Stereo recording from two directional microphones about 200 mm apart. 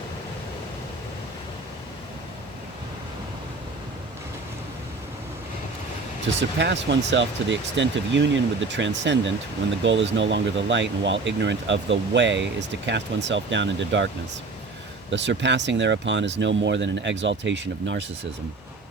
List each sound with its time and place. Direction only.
6.6 s speech: 60° right (ahead or behind)
15.1 s speech: 65° right (ahead or behind)